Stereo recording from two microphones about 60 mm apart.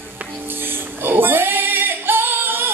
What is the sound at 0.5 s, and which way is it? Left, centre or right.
Singing, right.